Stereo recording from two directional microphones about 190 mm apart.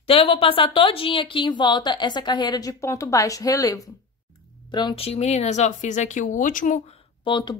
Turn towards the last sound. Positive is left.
turn(degrees=25)  # may be behind; listen again after turning